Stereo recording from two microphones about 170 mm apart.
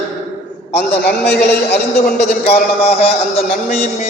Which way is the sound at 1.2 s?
80° left.